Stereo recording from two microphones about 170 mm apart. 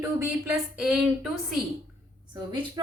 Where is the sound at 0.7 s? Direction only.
5° right (ahead or behind).